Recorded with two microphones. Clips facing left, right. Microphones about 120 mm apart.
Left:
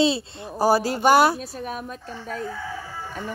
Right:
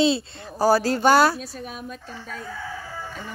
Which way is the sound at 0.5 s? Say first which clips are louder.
Right 1 dB; 20° left (ahead or behind).